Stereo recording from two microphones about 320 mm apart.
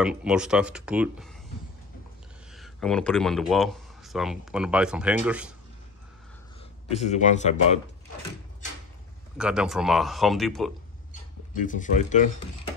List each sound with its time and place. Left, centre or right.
0.0 s speech: centre
2.5 s speech: centre
6.9 s a man's voice: left
9.4 s speech: centre
11.6 s a man's voice: left